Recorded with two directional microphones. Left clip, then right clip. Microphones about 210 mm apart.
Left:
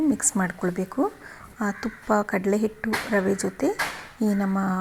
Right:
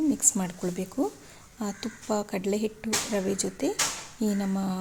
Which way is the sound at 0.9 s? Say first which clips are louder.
Left 4 dB; 10° left (ahead or behind).